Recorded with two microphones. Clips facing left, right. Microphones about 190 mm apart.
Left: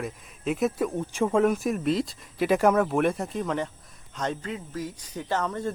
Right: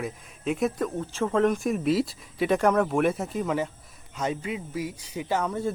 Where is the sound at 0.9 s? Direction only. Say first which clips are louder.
Left 2 dB; 15° left (ahead or behind).